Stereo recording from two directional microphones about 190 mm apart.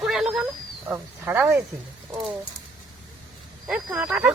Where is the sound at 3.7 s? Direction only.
5° right (ahead or behind).